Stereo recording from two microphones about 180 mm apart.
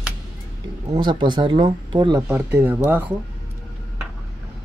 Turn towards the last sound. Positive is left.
turn(degrees=-10)  # may be behind; listen again after turning